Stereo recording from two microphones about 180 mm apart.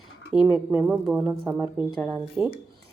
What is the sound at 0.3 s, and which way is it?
A woman's voice, 5° right (ahead or behind).